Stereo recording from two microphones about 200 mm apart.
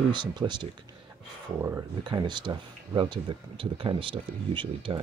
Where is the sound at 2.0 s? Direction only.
20° right (ahead or behind).